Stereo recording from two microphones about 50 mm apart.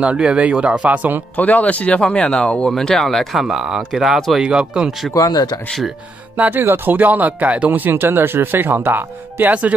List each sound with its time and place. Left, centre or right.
0.0 s speech: right
1.3 s speech: left
2.7 s speech: centre
3.4 s speech: centre
6.3 s speech: right
6.6 s speech: right
7.9 s speech: right
9.5 s speech: right